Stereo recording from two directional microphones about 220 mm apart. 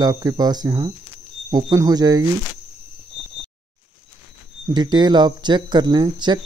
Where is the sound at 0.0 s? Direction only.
15° right (ahead or behind).